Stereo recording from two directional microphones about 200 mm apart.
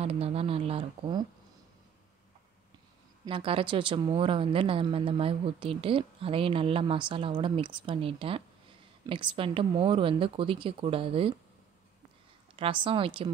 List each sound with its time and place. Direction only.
0.0 s speech: 30° right (ahead or behind)
3.3 s speech: 25° right (ahead or behind)
12.5 s speech: 25° right (ahead or behind)